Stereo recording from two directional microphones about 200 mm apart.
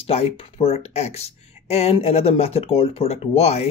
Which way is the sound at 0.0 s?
30° left (ahead or behind).